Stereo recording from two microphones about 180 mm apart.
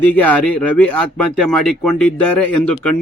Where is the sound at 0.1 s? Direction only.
10° left (ahead or behind).